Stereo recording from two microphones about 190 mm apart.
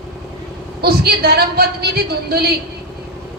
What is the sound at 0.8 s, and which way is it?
A woman's voice, 55° right (ahead or behind).